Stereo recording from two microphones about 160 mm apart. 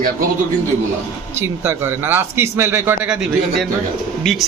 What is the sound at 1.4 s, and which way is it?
A man's voice, 15° right (ahead or behind).